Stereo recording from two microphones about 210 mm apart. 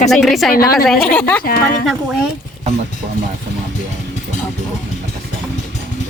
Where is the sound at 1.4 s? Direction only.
45° left (ahead or behind).